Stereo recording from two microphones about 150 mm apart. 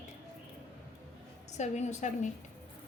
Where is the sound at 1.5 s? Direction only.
50° left (ahead or behind).